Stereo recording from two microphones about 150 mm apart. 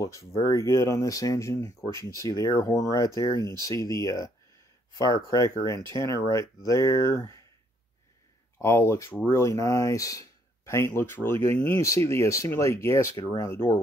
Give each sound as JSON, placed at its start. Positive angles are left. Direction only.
{"t": 0.0, "sound": "speech", "side_deg": 20}
{"t": 8.5, "sound": "speech", "side_deg": 15}